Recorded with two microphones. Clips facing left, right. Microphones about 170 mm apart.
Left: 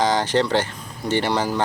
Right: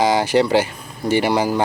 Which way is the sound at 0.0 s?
10° right (ahead or behind).